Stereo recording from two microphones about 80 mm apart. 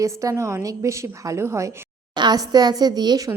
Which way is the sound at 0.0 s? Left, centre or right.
Right.